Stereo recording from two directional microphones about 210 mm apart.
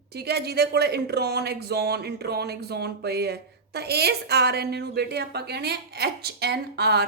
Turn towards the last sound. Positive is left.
turn(degrees=-50)  # may be behind; listen again after turning